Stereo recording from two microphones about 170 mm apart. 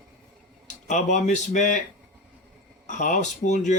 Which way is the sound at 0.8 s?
45° left (ahead or behind).